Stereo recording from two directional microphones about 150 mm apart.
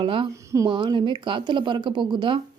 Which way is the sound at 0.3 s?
20° right (ahead or behind).